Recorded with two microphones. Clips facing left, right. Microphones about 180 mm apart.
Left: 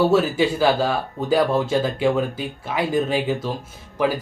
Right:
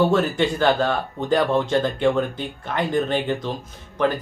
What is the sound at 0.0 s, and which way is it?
Speech, 5° left (ahead or behind).